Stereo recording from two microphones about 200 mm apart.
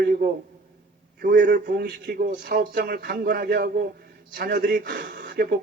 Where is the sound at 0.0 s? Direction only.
45° right (ahead or behind).